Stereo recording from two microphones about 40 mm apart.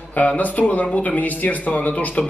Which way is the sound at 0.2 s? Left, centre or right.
Left.